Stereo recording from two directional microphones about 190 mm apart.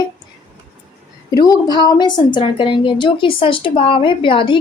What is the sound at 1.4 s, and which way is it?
A woman's voice, 20° left (ahead or behind).